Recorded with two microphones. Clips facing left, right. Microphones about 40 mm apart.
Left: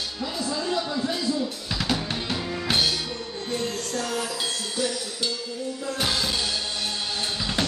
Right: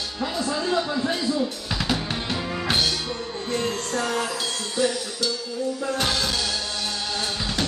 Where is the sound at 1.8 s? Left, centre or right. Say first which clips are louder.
Right 1 dB; centre.